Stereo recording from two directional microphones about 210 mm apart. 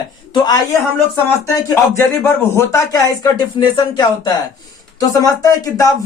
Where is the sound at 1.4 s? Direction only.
10° left (ahead or behind).